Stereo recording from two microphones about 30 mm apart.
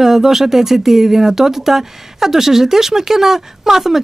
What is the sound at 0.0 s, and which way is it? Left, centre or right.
Speech, centre.